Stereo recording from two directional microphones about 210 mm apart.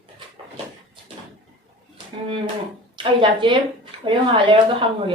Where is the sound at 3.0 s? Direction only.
25° right (ahead or behind).